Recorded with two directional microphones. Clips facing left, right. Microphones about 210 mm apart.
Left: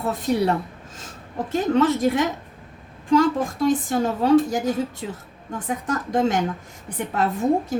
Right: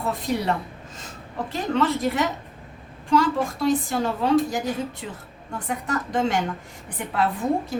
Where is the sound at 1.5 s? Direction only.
45° left (ahead or behind).